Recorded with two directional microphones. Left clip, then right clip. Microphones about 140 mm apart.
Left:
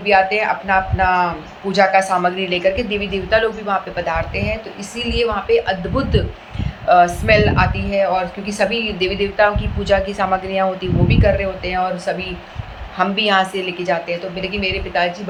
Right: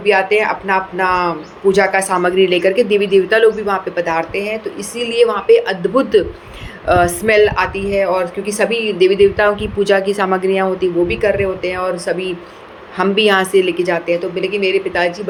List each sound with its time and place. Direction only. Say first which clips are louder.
0.0 s a woman's voice: right 2 dB; 40° right (ahead or behind)